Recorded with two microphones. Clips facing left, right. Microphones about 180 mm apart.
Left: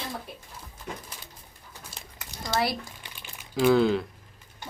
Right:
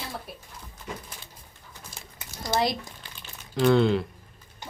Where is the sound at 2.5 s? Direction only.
20° right (ahead or behind).